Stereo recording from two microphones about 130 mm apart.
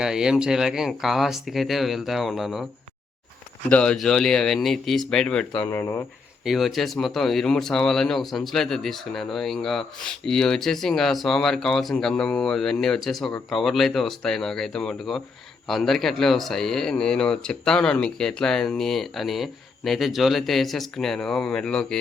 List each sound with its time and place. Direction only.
0.0 s speech: 5° right (ahead or behind)
3.7 s speech: 10° left (ahead or behind)
5.6 s speech: 20° left (ahead or behind)
6.4 s speech: centre (ahead or behind)